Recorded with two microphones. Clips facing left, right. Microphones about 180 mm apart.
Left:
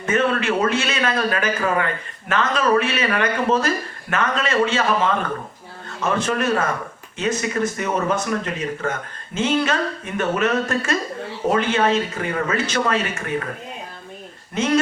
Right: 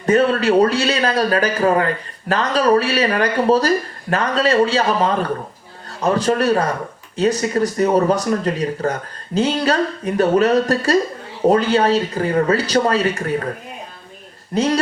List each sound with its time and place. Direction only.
0.0 s speech: 35° right (ahead or behind)
14.5 s speech: 35° right (ahead or behind)